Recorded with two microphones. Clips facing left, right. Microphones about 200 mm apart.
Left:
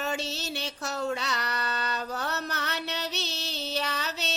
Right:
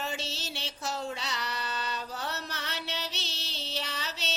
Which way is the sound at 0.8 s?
65° left (ahead or behind).